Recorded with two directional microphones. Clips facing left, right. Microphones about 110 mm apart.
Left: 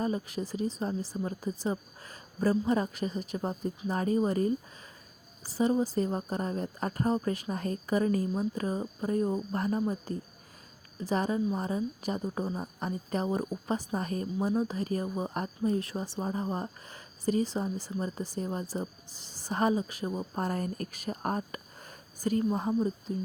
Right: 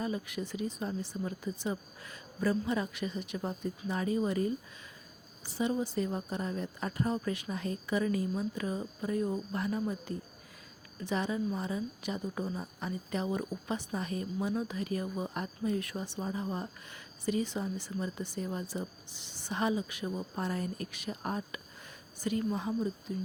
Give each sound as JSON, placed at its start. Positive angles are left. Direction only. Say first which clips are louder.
{"t": 0.0, "sound": "speech", "louder": "left 4 dB", "side_deg": 35}